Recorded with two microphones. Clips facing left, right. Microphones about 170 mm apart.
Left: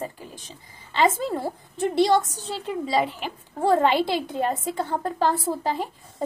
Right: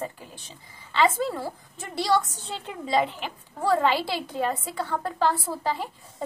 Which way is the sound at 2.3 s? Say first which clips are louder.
Left 6 dB; 35° left (ahead or behind).